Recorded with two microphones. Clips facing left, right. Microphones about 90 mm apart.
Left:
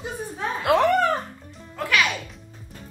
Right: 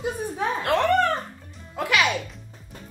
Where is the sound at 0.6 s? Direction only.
5° left (ahead or behind).